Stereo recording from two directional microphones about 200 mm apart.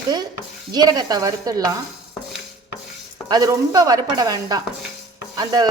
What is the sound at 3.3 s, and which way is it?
Speech, 20° right (ahead or behind).